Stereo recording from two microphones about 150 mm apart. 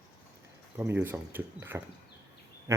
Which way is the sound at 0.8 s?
15° right (ahead or behind).